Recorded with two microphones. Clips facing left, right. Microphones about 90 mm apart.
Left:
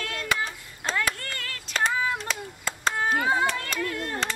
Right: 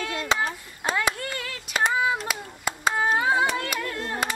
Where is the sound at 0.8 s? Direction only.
15° right (ahead or behind).